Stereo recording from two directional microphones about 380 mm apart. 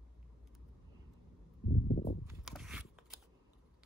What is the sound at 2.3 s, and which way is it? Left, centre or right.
Scissors, centre.